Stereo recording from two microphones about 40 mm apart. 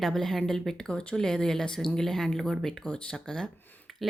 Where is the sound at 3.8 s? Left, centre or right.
Centre.